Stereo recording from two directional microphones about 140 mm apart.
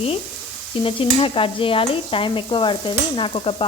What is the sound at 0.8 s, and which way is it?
Sizzle, 40° left (ahead or behind).